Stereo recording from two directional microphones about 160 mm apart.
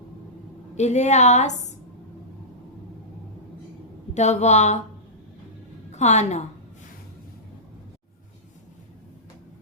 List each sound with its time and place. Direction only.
0.8 s a woman's voice: 45° left (ahead or behind)
4.1 s a woman's voice: 45° left (ahead or behind)
5.9 s a woman's voice: 45° left (ahead or behind)